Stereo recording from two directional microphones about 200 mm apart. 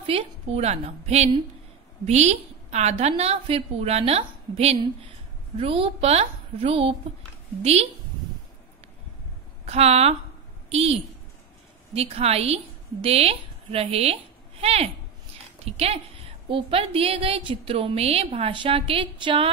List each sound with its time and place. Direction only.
0.0 s a woman's voice: 30° right (ahead or behind)
9.7 s a woman's voice: 30° right (ahead or behind)